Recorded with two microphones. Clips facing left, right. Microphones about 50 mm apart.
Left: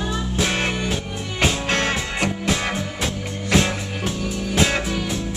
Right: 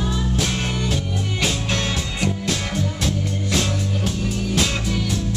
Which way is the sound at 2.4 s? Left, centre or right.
Left.